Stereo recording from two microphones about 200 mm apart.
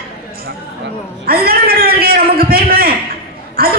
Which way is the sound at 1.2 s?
50° right (ahead or behind).